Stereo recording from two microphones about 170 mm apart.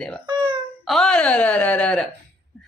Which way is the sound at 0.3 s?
30° right (ahead or behind).